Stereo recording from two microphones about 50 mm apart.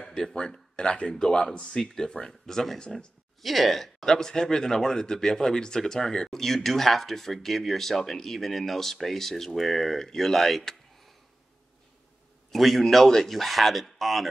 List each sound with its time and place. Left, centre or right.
0.0 s speech: centre
3.4 s speech: centre
12.4 s speech: centre